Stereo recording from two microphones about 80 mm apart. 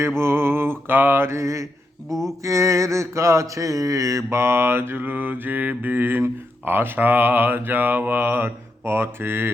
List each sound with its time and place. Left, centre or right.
0.2 s mantra: right
2.0 s speech: centre
2.4 s a sound: right